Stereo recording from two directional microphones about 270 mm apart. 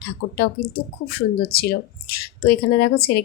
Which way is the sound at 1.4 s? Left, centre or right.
Left.